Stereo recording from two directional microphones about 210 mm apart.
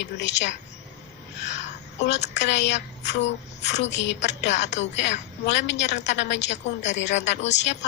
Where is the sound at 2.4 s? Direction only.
55° left (ahead or behind).